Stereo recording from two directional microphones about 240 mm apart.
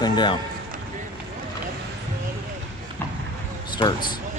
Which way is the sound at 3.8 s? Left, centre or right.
Centre.